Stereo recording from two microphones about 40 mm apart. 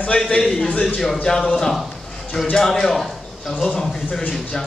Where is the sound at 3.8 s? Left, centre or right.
Centre.